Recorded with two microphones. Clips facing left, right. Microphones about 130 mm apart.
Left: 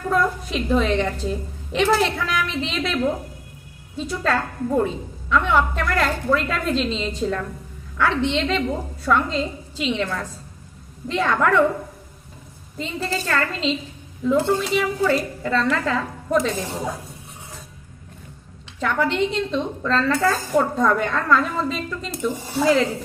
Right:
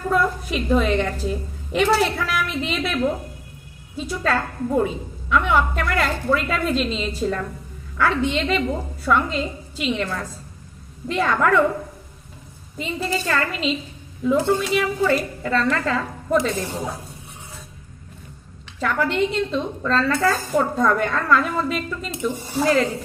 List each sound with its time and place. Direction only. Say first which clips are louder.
0.1 s a woman's voice: even; 5° right (ahead or behind)
12.8 s a woman's voice: right 1 dB; 10° right (ahead or behind)
18.8 s a woman's voice: even; 5° right (ahead or behind)